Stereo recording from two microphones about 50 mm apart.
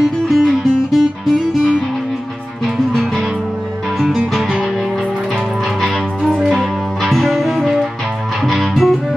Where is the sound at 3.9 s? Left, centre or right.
Centre.